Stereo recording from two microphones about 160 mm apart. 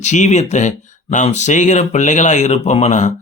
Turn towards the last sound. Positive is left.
turn(degrees=45)  # may be behind; listen again after turning